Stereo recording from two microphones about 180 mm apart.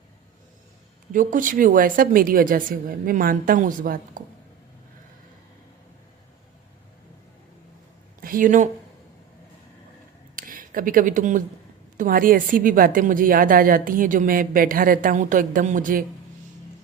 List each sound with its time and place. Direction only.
1.1 s a woman's voice: 45° right (ahead or behind)
8.2 s speech: 50° right (ahead or behind)
10.3 s a woman's voice: 50° right (ahead or behind)